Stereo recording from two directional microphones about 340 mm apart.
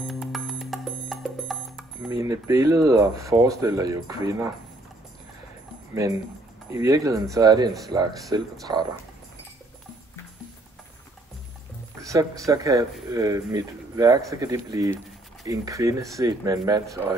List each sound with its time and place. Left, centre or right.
0.0 s music: centre
6.7 s speech: centre
12.0 s music: centre
12.4 s speech: centre